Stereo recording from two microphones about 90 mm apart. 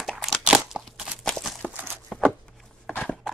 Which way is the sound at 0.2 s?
5° right (ahead or behind).